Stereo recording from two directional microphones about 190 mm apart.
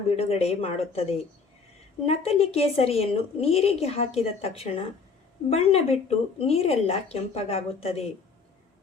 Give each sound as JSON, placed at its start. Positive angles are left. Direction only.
{"t": 0.2, "sound": "a woman's voice", "side_deg": 35}
{"t": 2.0, "sound": "a woman's voice", "side_deg": 30}